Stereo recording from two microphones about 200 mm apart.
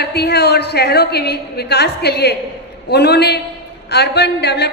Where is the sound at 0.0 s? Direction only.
55° left (ahead or behind).